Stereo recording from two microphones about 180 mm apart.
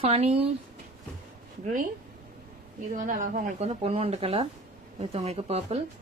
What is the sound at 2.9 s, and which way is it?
A woman's voice, 50° right (ahead or behind).